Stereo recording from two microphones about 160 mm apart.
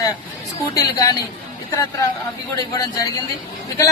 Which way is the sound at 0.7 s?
25° left (ahead or behind).